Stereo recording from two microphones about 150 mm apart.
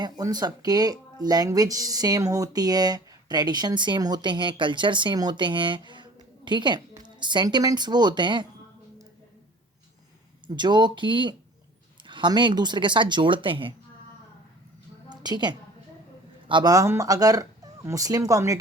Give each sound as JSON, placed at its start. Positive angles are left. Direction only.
{"t": 0.0, "sound": "speech", "side_deg": -25}
{"t": 10.4, "sound": "speech", "side_deg": -30}
{"t": 15.1, "sound": "a sound", "side_deg": -25}
{"t": 16.5, "sound": "speech", "side_deg": -30}